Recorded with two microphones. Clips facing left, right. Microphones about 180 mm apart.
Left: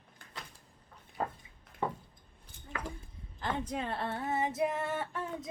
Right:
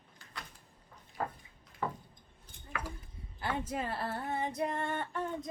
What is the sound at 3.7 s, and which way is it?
Female singing, 5° right (ahead or behind).